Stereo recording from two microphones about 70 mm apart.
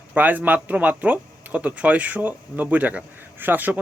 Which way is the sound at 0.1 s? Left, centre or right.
Right.